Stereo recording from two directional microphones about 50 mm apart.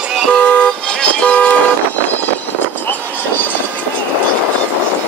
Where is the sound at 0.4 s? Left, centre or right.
Left.